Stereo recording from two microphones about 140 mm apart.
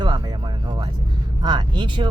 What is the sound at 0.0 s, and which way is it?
Music, 35° right (ahead or behind).